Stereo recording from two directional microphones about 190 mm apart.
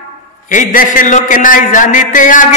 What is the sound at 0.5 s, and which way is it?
A man's voice, 45° left (ahead or behind).